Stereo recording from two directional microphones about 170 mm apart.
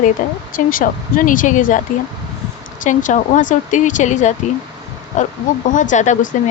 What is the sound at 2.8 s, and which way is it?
Speech, 50° left (ahead or behind).